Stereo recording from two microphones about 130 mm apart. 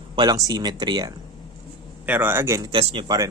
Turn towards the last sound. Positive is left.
turn(degrees=-35)  # may be behind; listen again after turning